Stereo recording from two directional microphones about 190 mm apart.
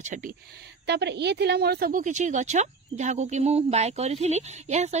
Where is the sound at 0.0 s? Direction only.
45° right (ahead or behind).